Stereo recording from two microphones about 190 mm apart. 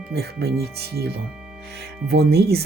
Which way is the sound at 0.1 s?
55° right (ahead or behind).